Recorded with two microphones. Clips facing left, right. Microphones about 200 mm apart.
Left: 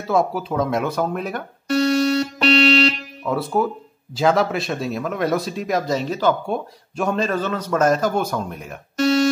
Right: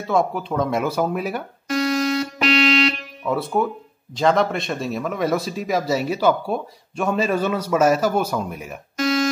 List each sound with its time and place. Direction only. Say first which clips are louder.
0.0 s speech: left 1 dB; 5° left (ahead or behind)
1.7 s music: left 3 dB; 35° left (ahead or behind)
3.3 s speech: left 1 dB; centre (ahead or behind)
9.0 s music: left 3 dB; 35° left (ahead or behind)